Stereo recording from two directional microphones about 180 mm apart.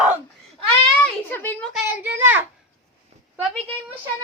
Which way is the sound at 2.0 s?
10° right (ahead or behind).